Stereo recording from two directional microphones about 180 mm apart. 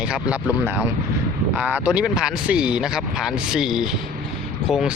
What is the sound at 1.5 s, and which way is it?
Speech, 10° right (ahead or behind).